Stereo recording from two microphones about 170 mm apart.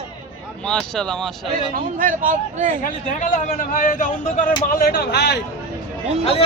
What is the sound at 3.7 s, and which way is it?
Speech, 50° left (ahead or behind).